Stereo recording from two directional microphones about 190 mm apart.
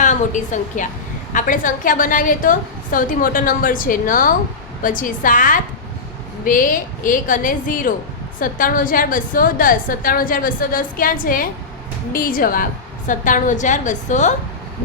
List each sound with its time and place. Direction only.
0.0 s a woman's voice: 40° left (ahead or behind)